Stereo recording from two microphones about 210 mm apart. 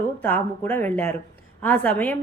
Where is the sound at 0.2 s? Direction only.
10° left (ahead or behind).